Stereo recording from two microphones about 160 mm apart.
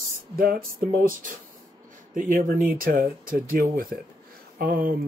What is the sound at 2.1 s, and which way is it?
Speech, 55° right (ahead or behind).